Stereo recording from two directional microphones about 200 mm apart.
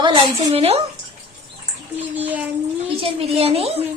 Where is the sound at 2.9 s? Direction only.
30° right (ahead or behind).